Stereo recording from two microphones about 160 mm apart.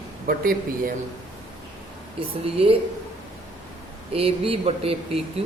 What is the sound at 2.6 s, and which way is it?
Speech, 35° right (ahead or behind).